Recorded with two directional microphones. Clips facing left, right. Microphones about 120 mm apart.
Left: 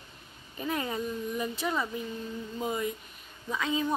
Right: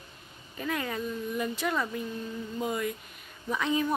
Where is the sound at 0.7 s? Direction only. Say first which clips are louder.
Even; 25° left (ahead or behind).